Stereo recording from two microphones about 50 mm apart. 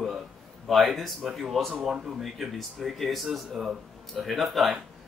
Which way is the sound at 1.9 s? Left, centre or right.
Centre.